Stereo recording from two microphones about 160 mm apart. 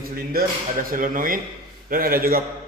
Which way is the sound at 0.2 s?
65° right (ahead or behind).